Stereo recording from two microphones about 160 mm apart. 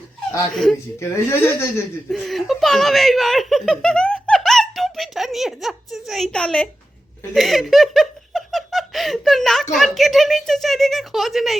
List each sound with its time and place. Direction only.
0.5 s speech: centre (ahead or behind)
0.9 s speech: 20° left (ahead or behind)
2.0 s speech: centre (ahead or behind)
7.3 s giggle: centre (ahead or behind)
9.7 s speech: centre (ahead or behind)